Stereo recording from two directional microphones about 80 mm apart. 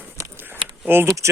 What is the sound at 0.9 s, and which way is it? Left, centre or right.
Speech, right.